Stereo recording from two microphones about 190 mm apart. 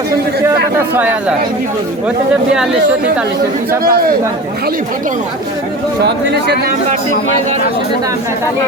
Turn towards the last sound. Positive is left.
turn(degrees=-60)  # may be behind; listen again after turning